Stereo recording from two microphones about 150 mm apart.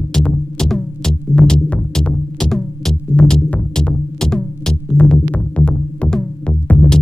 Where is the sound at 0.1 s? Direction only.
5° left (ahead or behind).